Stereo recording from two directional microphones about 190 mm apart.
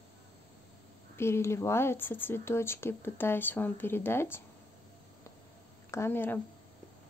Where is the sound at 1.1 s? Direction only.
15° left (ahead or behind).